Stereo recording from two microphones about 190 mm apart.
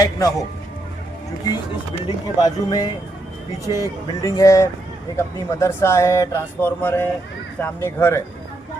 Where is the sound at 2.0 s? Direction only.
20° left (ahead or behind).